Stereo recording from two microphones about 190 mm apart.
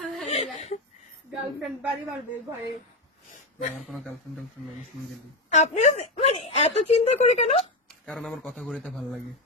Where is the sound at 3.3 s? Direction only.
40° left (ahead or behind).